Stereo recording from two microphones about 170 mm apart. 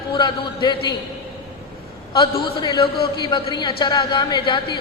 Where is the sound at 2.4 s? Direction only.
30° left (ahead or behind).